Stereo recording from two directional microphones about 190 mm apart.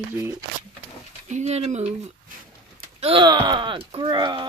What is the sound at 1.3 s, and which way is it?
Speech, 35° right (ahead or behind).